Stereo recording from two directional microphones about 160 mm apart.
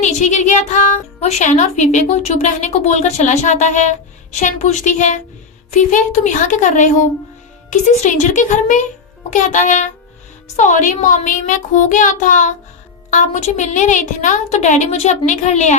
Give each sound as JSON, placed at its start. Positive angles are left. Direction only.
{"t": 0.0, "sound": "speech", "side_deg": 50}
{"t": 6.2, "sound": "speech", "side_deg": 50}